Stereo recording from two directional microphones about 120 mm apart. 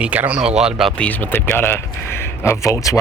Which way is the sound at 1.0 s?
15° left (ahead or behind).